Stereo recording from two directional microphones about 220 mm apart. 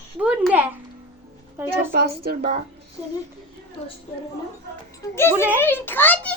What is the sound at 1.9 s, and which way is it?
Speech, 45° right (ahead or behind).